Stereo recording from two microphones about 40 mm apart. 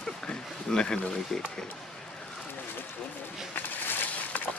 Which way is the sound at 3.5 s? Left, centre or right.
Left.